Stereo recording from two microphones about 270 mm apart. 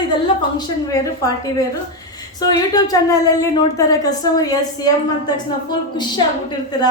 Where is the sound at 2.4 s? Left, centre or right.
Centre.